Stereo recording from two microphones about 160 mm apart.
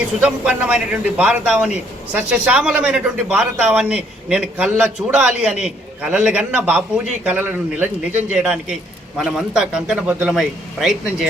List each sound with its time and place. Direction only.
0.2 s a man's voice: 5° right (ahead or behind)